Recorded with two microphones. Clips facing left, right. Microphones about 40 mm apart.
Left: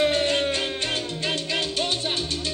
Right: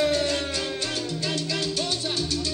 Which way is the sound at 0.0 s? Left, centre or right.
Left.